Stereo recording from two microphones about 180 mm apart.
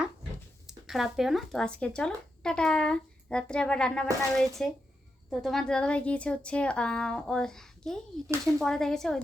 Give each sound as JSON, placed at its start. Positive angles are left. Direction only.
{"t": 0.7, "sound": "speech", "side_deg": 0}